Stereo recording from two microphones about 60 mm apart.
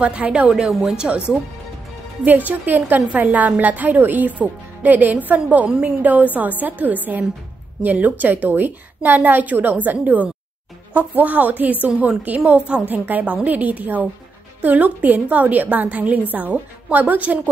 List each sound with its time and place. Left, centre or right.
0.0 s speech: right
0.5 s a woman's voice: centre
2.2 s speech: right